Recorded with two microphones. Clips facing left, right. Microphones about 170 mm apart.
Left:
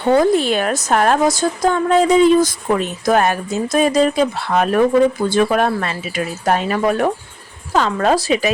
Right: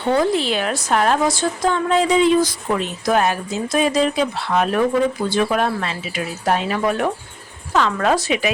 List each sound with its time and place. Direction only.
0.1 s a woman's voice: 45° left (ahead or behind)